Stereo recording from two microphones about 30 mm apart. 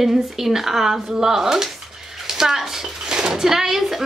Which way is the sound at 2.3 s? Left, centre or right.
Centre.